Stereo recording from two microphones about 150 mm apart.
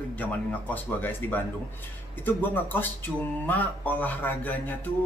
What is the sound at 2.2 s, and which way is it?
Speech, 10° left (ahead or behind).